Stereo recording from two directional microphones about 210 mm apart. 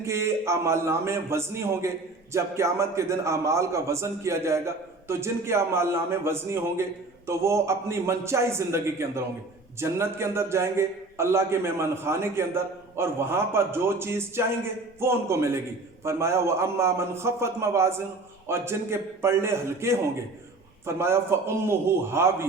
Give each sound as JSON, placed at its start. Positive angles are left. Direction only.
{"t": 0.0, "sound": "a man's voice", "side_deg": -15}